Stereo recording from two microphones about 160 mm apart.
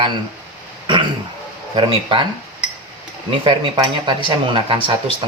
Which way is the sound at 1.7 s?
30° right (ahead or behind).